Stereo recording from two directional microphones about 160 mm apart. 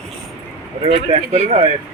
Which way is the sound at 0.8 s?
40° right (ahead or behind).